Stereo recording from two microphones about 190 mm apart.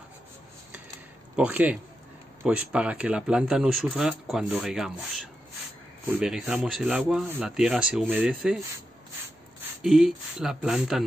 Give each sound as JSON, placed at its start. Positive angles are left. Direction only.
{"t": 1.3, "sound": "speech", "side_deg": -5}